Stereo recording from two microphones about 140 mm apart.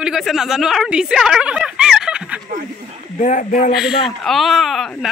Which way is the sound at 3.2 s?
65° left (ahead or behind).